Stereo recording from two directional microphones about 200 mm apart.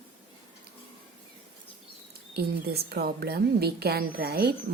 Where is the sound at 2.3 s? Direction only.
50° right (ahead or behind).